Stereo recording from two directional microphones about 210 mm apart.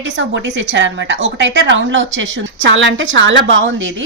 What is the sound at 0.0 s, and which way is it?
A woman's voice, 60° right (ahead or behind).